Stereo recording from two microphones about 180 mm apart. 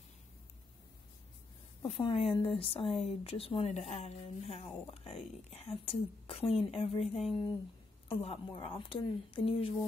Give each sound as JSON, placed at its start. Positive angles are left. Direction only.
{"t": 1.8, "sound": "a woman's voice", "side_deg": 25}